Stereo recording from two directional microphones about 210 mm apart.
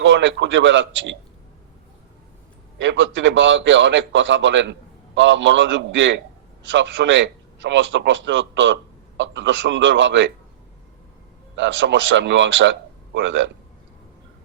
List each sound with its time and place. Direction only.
0.0 s a man's voice: 60° right (ahead or behind)
2.7 s a man's voice: 60° right (ahead or behind)
11.5 s a man's voice: 60° right (ahead or behind)